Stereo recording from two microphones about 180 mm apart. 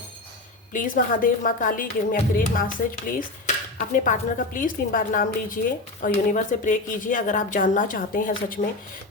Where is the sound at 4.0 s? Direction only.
50° left (ahead or behind).